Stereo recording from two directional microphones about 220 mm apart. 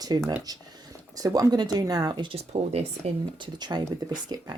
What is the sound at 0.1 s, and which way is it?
Speech, 15° right (ahead or behind).